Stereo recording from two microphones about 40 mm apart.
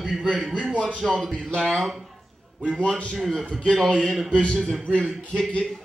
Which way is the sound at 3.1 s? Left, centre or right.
Centre.